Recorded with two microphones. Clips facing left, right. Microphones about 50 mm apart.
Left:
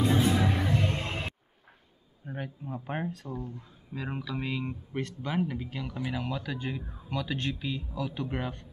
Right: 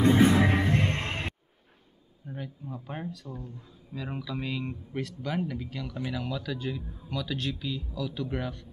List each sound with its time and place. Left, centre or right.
0.0 s music: right
2.2 s speech: left
3.3 s speech: left
4.3 s a man's voice: centre